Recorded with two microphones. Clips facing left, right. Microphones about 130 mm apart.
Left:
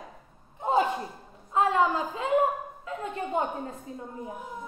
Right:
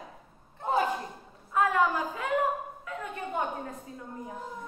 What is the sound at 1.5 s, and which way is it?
A woman's voice, 25° left (ahead or behind).